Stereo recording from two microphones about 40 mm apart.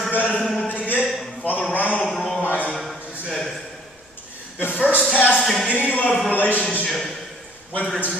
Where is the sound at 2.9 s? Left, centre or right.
Left.